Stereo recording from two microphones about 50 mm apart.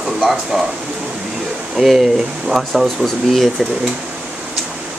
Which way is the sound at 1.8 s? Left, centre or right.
Centre.